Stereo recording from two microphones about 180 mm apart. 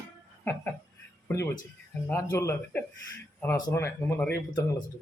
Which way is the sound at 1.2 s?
15° left (ahead or behind).